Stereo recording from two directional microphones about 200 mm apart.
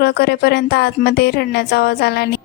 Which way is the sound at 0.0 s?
55° left (ahead or behind).